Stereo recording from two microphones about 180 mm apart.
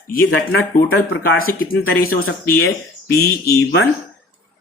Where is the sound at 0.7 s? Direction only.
55° left (ahead or behind).